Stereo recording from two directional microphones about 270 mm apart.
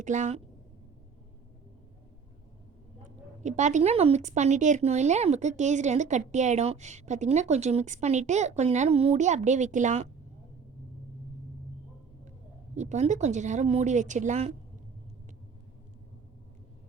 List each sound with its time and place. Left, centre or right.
0.0 s speech: right
3.4 s speech: right
12.7 s speech: right